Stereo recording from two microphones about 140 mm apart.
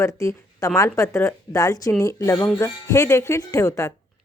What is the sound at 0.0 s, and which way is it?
Speech, 20° left (ahead or behind).